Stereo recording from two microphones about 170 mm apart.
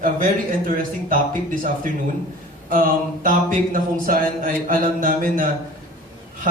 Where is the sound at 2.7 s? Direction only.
55° right (ahead or behind).